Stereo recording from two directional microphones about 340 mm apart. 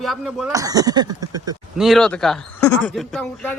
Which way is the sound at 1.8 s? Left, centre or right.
Centre.